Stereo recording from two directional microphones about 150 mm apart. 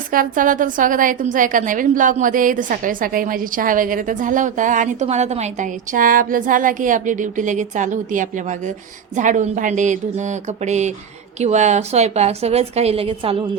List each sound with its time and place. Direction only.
0.1 s a woman's voice: 65° right (ahead or behind); by 13.3 s 40° right (ahead or behind)